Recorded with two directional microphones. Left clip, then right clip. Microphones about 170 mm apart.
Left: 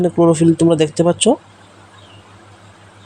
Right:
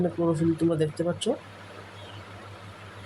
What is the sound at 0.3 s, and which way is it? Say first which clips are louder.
Speech: left 12 dB; 40° left (ahead or behind).